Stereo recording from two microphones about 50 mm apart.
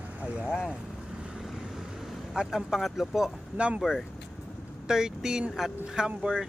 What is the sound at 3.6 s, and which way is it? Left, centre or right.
Speech, right.